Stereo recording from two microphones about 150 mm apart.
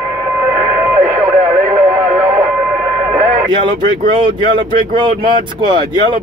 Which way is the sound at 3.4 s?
30° right (ahead or behind).